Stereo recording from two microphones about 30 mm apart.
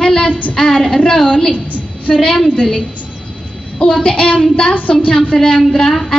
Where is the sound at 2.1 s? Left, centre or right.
Left.